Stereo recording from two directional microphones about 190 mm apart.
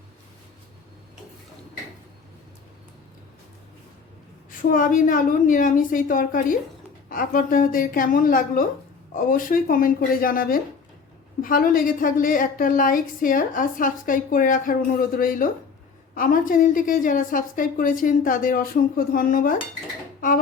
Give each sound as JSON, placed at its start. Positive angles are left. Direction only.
{"t": 4.7, "sound": "a woman's voice", "side_deg": 45}